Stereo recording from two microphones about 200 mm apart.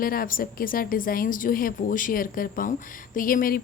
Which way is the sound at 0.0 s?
45° left (ahead or behind).